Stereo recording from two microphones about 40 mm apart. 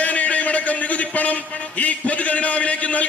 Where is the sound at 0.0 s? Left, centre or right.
Left.